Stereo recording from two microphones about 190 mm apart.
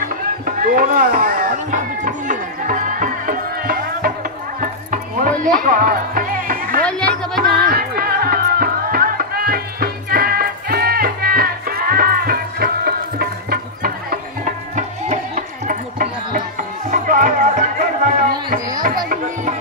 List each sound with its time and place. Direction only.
0.5 s a sound: 45° right (ahead or behind)
5.4 s music: 45° right (ahead or behind)
6.8 s music: 5° left (ahead or behind)
7.6 s music: 50° right (ahead or behind)